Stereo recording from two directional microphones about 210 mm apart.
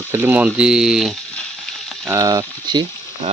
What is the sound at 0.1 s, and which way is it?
Speech, 10° right (ahead or behind).